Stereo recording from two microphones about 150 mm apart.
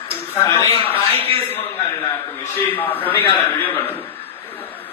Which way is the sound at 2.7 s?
10° left (ahead or behind).